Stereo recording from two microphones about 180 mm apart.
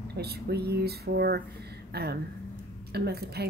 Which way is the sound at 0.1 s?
60° right (ahead or behind).